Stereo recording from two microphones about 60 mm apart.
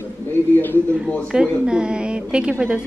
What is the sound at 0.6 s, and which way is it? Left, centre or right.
Speech, left.